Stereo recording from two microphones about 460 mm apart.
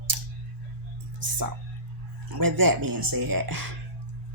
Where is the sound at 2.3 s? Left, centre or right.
Right.